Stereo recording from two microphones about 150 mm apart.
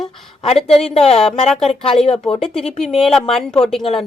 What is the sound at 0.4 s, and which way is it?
Speech, 40° left (ahead or behind).